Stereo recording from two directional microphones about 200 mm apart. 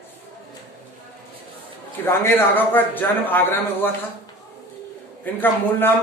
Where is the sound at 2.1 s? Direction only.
10° left (ahead or behind).